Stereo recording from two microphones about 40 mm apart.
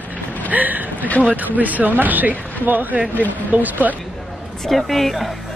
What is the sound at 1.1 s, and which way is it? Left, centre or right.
Speech, left.